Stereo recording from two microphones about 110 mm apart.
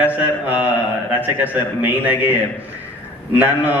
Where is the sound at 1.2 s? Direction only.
15° right (ahead or behind).